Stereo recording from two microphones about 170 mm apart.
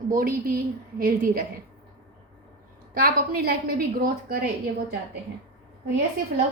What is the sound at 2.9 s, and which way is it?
A woman's voice, 60° right (ahead or behind).